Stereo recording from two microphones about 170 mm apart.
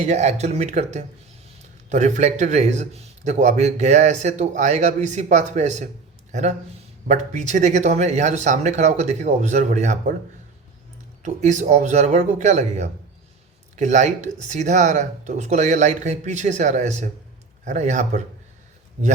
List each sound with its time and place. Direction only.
0.0 s a man's voice: 40° right (ahead or behind)
7.1 s a man's voice: 45° right (ahead or behind)
11.2 s a man's voice: 45° right (ahead or behind)